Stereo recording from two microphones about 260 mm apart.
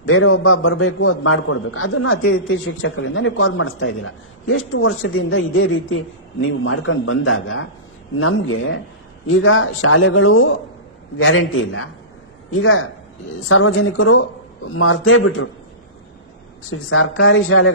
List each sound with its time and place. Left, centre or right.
0.0 s a man's voice: left
16.7 s a man's voice: left